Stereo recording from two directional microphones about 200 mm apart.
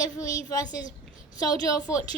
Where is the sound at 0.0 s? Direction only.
15° left (ahead or behind).